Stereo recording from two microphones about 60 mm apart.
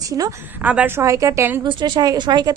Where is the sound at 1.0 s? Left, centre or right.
Right.